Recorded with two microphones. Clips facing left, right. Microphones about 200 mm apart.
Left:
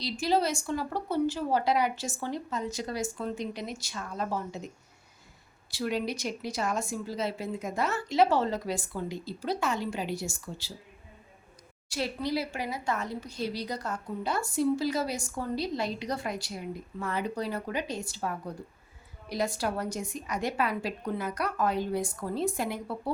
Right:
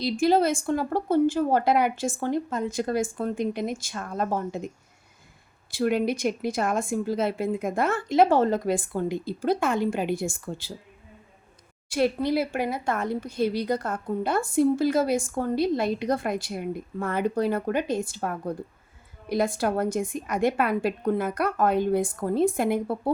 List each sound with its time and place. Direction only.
0.0 s speech: 50° right (ahead or behind)
5.7 s speech: 55° right (ahead or behind)
11.9 s speech: 55° right (ahead or behind)